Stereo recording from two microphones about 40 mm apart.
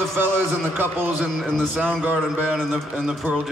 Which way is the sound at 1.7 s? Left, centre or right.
Right.